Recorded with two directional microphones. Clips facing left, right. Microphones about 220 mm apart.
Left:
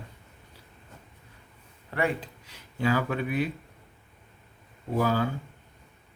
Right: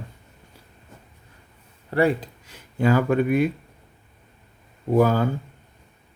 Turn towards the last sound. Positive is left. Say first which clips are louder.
# right 7 dB
turn(degrees=-50)  # may be behind; listen again after turning